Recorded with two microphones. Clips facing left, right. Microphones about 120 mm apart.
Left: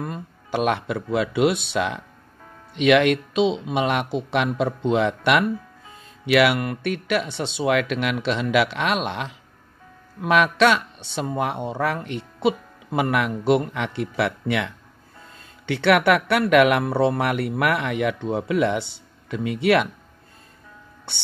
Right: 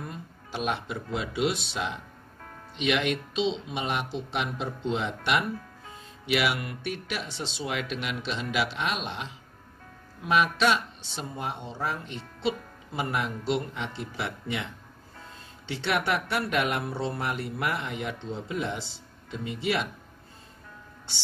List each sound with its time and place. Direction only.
0.0 s speech: 60° left (ahead or behind)